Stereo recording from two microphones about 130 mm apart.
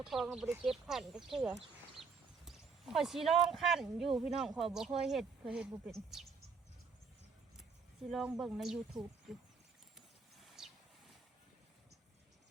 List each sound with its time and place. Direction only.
0.0 s speech: 5° right (ahead or behind)
2.0 s a sound: centre (ahead or behind)
2.5 s speech: 5° right (ahead or behind)
8.1 s speech: centre (ahead or behind)
10.4 s vehicle: centre (ahead or behind)